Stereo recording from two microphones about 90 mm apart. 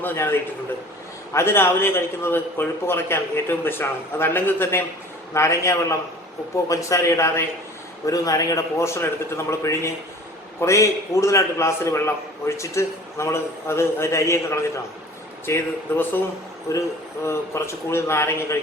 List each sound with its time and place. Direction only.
0.0 s a man's voice: 25° left (ahead or behind)